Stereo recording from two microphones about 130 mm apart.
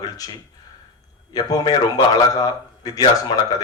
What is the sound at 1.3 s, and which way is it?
Speech, 30° left (ahead or behind).